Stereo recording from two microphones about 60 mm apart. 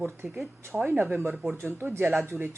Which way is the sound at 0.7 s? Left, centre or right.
Right.